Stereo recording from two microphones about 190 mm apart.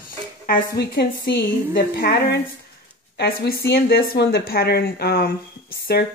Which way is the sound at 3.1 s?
55° left (ahead or behind).